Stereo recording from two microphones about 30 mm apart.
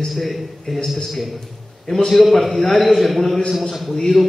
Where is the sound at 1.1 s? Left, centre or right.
Centre.